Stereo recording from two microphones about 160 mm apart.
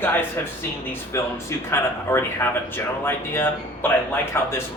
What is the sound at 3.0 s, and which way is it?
A man's voice, 15° left (ahead or behind).